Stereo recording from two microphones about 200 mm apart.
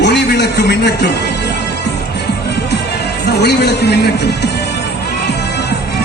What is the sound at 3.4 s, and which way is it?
Speech, 55° left (ahead or behind).